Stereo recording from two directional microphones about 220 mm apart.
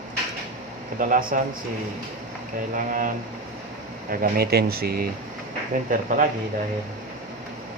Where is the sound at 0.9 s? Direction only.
40° right (ahead or behind).